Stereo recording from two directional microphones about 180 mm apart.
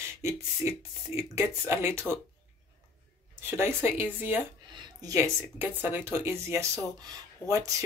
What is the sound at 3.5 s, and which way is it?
Speech, 10° right (ahead or behind).